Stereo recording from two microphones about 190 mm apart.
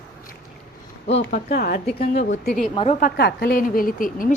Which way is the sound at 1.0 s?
35° left (ahead or behind).